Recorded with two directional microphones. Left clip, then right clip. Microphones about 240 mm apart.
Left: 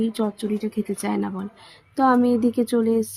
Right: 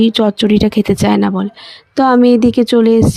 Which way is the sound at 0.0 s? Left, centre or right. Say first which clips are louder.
Right 13 dB; right.